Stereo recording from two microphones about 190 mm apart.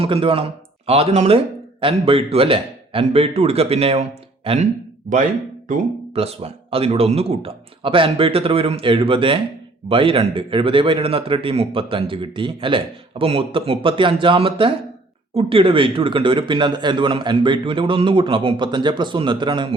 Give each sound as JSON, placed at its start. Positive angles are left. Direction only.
{"t": 0.0, "sound": "a man's voice", "side_deg": -30}